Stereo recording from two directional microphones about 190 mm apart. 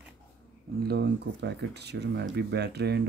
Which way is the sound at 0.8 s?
65° right (ahead or behind).